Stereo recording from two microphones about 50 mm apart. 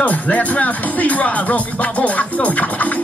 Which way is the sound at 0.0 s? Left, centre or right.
Left.